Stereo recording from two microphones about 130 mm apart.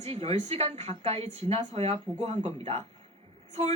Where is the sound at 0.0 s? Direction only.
55° right (ahead or behind).